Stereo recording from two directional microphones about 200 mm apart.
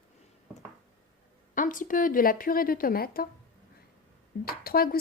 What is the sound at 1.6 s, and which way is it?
Speech, 40° left (ahead or behind).